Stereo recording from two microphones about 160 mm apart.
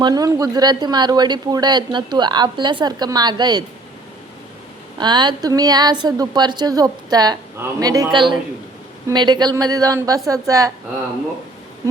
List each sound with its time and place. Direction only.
0.0 s speech: 25° right (ahead or behind)
4.9 s speech: 30° right (ahead or behind)